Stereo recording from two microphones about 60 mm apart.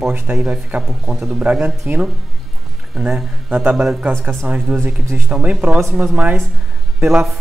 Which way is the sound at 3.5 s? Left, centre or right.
Right.